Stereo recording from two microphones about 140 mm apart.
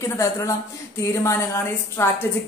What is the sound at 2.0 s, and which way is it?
Speech, 20° left (ahead or behind).